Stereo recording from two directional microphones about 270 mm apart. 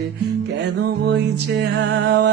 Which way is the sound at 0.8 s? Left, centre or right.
Right.